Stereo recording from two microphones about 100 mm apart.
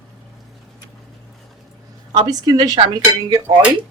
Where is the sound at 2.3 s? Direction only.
40° right (ahead or behind).